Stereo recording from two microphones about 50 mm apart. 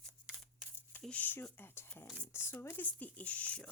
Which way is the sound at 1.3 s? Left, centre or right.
Left.